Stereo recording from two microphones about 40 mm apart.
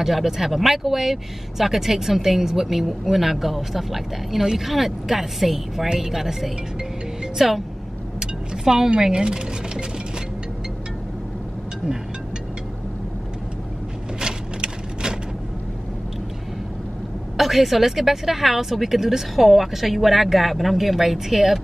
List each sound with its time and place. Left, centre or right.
0.0 s speech: centre
14.2 s a sound: centre
17.4 s speech: centre